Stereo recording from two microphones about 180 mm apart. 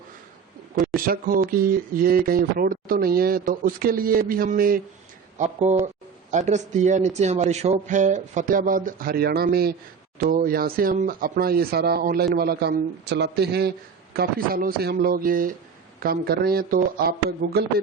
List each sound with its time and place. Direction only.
0.9 s speech: 50° right (ahead or behind)
5.4 s speech: 40° right (ahead or behind); by 17.7 s 60° right (ahead or behind)